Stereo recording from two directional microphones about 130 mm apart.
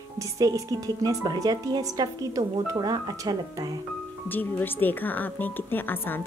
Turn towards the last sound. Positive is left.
turn(degrees=15)  # may be behind; listen again after turning